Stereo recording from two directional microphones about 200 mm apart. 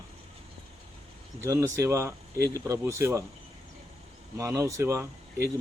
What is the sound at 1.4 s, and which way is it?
Speech, 15° right (ahead or behind).